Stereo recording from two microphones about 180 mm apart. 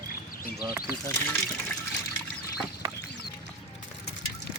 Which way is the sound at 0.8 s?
15° right (ahead or behind).